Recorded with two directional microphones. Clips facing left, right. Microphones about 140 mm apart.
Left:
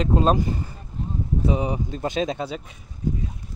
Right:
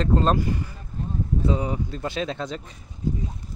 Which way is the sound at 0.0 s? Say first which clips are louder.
Left 1 dB; 10° left (ahead or behind).